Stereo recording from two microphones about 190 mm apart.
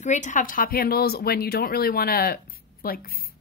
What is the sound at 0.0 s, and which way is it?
Speech, 40° left (ahead or behind).